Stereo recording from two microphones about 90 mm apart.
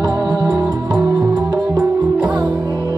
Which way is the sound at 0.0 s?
60° right (ahead or behind).